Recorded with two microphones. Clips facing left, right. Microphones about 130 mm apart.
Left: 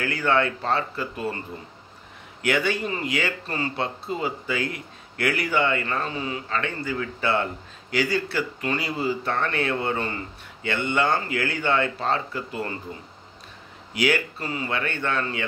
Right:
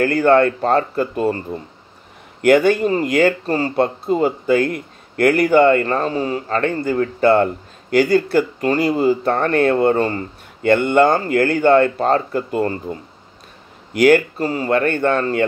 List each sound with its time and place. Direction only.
0.0 s speech: 45° right (ahead or behind)
2.4 s speech: 45° right (ahead or behind)
13.9 s speech: 50° right (ahead or behind)